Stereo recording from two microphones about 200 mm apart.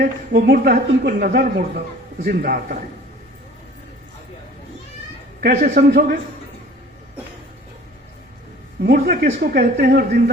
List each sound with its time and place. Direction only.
0.0 s a woman's voice: 50° right (ahead or behind)
5.4 s a woman's voice: 50° right (ahead or behind)
8.8 s a woman's voice: 50° right (ahead or behind)